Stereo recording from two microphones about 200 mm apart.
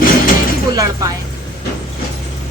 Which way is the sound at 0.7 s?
15° right (ahead or behind).